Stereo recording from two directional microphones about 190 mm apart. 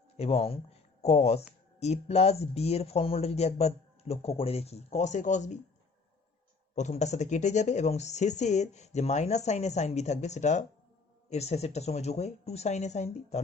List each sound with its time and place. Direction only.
0.2 s speech: 30° left (ahead or behind)
6.7 s speech: 35° left (ahead or behind)